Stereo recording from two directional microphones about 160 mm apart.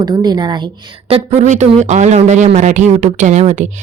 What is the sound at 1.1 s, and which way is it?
A woman's voice, 40° right (ahead or behind).